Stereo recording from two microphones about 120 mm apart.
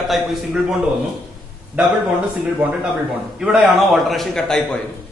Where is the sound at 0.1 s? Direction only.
5° right (ahead or behind).